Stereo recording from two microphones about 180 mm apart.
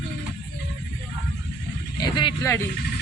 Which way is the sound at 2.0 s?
25° left (ahead or behind).